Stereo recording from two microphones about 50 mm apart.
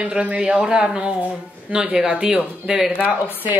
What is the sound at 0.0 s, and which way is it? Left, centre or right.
Speech, right.